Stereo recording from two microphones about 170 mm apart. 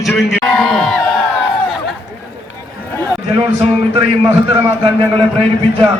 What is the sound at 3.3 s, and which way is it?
Speech, 30° right (ahead or behind).